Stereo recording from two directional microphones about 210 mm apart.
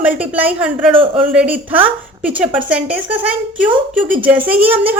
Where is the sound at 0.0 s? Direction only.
5° right (ahead or behind).